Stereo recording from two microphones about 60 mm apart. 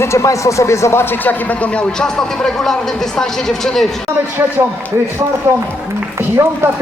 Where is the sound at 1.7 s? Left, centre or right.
Centre.